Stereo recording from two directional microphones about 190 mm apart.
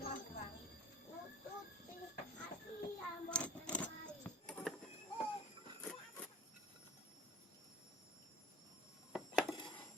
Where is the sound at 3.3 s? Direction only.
5° left (ahead or behind).